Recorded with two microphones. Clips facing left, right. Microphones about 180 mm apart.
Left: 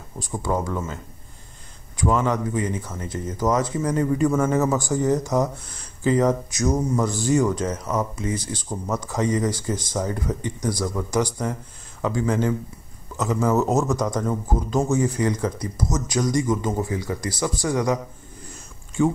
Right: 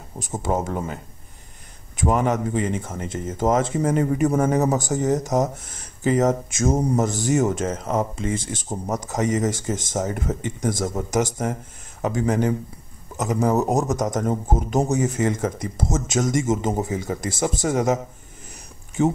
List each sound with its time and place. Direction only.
0.2 s speech: 20° right (ahead or behind)
2.0 s speech: 20° right (ahead or behind)
7.0 s speech: 20° right (ahead or behind)
18.5 s a sound: 20° right (ahead or behind)